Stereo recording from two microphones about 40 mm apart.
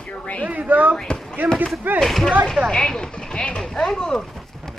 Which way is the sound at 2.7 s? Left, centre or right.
Centre.